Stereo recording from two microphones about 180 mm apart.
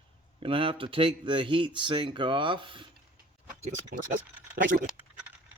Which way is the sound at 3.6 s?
45° right (ahead or behind).